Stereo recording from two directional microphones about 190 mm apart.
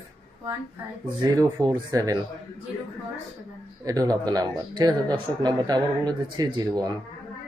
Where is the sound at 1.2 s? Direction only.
20° right (ahead or behind).